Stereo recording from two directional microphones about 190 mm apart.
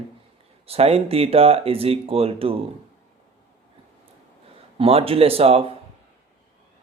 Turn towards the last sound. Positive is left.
turn(degrees=-30)  # may be behind; listen again after turning